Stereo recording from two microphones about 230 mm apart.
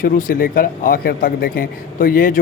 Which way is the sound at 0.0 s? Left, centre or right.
Left.